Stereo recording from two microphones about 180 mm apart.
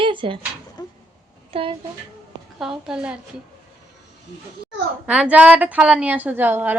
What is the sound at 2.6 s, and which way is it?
Speech, 5° right (ahead or behind).